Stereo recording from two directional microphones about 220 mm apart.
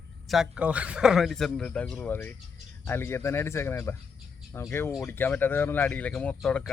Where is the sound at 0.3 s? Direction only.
5° right (ahead or behind).